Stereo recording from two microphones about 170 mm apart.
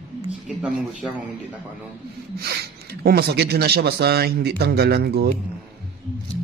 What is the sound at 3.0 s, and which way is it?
A man's voice, 70° right (ahead or behind).